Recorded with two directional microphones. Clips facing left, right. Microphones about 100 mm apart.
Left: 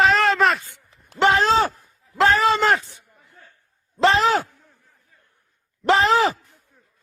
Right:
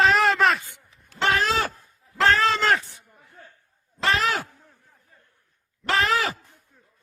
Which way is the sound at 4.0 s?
25° left (ahead or behind).